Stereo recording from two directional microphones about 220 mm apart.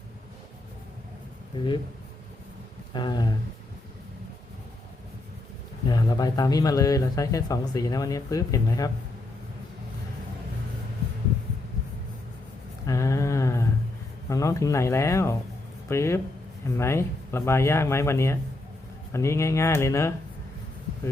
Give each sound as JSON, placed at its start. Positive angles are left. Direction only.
{"t": 1.5, "sound": "speech", "side_deg": 20}
{"t": 2.9, "sound": "speech", "side_deg": 20}
{"t": 5.9, "sound": "speech", "side_deg": 15}
{"t": 12.8, "sound": "a sound", "side_deg": 15}
{"t": 14.3, "sound": "speech", "side_deg": 15}